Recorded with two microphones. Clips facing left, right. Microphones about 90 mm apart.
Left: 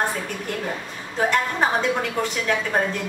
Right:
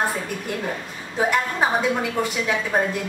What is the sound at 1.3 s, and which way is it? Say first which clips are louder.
A woman's voice: even; 5° right (ahead or behind).